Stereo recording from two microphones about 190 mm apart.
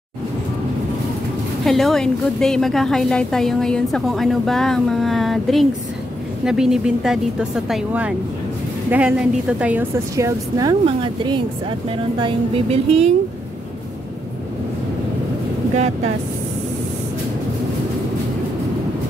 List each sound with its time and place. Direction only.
1.6 s a woman's voice: centre (ahead or behind); by 13.1 s 30° right (ahead or behind)